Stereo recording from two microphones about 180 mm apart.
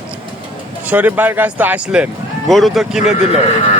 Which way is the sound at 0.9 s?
10° right (ahead or behind).